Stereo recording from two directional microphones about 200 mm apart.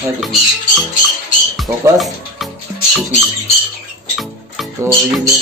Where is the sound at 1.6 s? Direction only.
Centre (ahead or behind).